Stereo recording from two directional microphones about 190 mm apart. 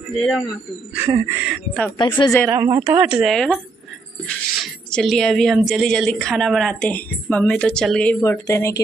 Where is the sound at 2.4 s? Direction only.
20° right (ahead or behind).